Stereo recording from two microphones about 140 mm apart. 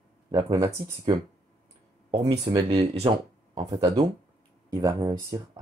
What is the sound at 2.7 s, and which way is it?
Speech, 40° right (ahead or behind).